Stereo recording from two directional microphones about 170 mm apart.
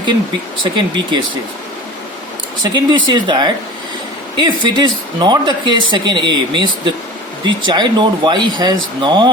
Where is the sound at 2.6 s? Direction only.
25° right (ahead or behind).